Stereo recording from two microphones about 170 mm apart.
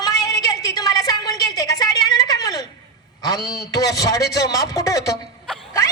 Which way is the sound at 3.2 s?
20° left (ahead or behind).